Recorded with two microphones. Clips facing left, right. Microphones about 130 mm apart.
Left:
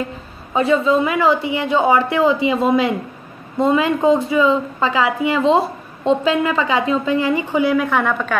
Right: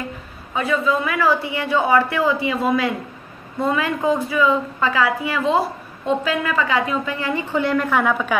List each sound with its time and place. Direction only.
0.6 s a woman's voice: 25° left (ahead or behind); by 8.4 s 5° right (ahead or behind)